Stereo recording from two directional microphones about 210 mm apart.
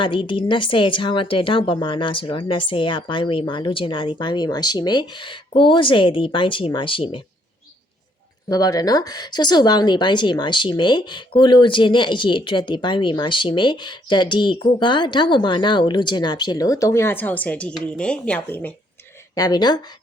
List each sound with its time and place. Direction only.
0.0 s speech: 25° left (ahead or behind)
8.4 s speech: 20° left (ahead or behind)
19.3 s speech: 20° left (ahead or behind)